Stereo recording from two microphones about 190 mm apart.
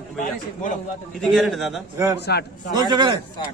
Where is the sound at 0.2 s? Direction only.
40° left (ahead or behind).